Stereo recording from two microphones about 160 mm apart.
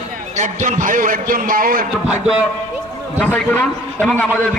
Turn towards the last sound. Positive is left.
turn(degrees=10)  # may be behind; listen again after turning